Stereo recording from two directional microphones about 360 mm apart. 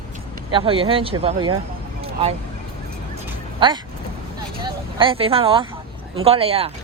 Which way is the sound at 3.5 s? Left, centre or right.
Centre.